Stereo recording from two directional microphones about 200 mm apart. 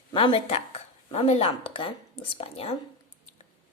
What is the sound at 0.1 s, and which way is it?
Speech, 25° left (ahead or behind).